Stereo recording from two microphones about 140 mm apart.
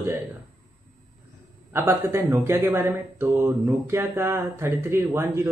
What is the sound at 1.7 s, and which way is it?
Speech, 15° right (ahead or behind).